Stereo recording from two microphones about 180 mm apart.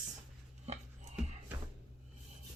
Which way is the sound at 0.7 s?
35° right (ahead or behind).